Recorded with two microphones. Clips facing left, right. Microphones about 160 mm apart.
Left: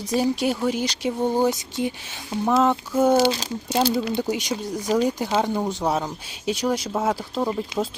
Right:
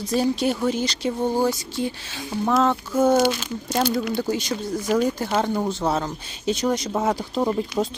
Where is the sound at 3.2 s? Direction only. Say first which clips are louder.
Even; 30° left (ahead or behind).